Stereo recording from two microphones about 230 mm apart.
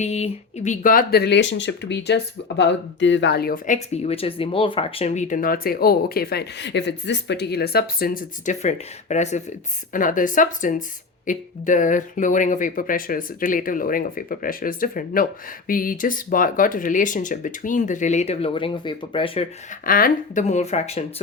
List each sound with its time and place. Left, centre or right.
0.0 s speech: left
19.8 s speech: left